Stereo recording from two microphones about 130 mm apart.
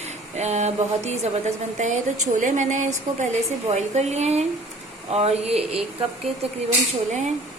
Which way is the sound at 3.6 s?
60° right (ahead or behind).